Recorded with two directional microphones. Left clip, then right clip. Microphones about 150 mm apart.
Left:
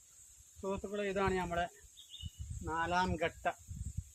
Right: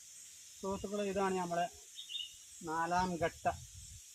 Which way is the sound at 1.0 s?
15° left (ahead or behind).